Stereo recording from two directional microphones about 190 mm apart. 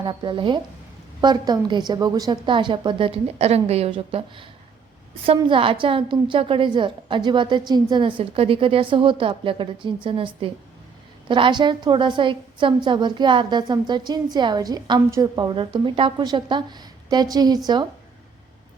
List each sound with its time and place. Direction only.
0.0 s a woman's voice: 25° right (ahead or behind)